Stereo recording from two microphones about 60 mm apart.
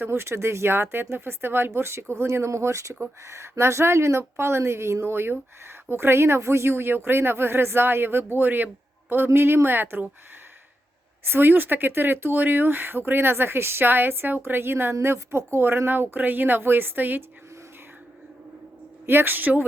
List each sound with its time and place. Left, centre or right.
0.0 s speech: right
11.3 s speech: right
19.0 s speech: right